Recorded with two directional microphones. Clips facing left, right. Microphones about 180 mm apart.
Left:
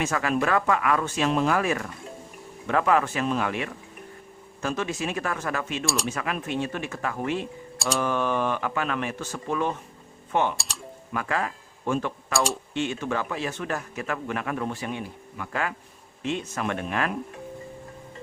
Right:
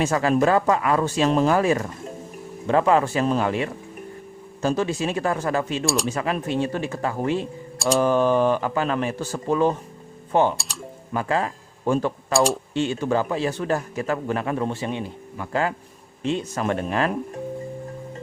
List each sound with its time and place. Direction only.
0.0 s a man's voice: 30° right (ahead or behind)
5.8 s speech: centre (ahead or behind)
6.1 s a man's voice: 30° right (ahead or behind)
7.8 s mantra: centre (ahead or behind)
8.0 s a man's voice: 35° right (ahead or behind)
10.7 s typing: centre (ahead or behind)
11.1 s speech: 30° right (ahead or behind)
12.3 s speech: centre (ahead or behind)
12.7 s a man's voice: 35° right (ahead or behind)